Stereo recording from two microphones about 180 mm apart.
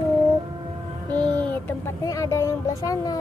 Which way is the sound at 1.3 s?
10° left (ahead or behind).